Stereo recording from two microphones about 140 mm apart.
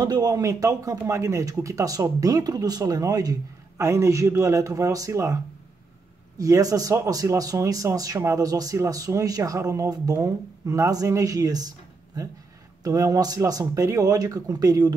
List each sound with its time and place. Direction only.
0.0 s speech: 30° right (ahead or behind)
12.8 s speech: 25° right (ahead or behind)